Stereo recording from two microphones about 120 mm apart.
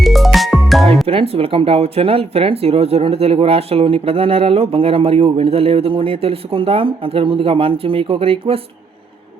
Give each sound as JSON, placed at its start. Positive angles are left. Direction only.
{"t": 0.0, "sound": "music", "side_deg": 0}
{"t": 1.0, "sound": "speech", "side_deg": -50}